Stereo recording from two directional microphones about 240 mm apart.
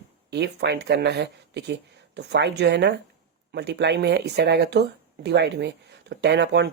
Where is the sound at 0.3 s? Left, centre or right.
Right.